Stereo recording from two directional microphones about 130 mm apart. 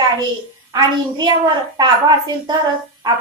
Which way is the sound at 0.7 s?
30° right (ahead or behind).